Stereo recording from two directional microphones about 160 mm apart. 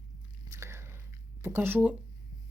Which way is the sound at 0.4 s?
20° right (ahead or behind).